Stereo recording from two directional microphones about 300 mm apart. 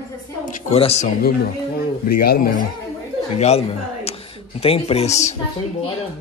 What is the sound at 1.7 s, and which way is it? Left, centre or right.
Speech, left.